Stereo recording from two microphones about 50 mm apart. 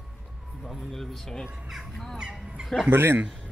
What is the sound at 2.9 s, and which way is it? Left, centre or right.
Speech, right.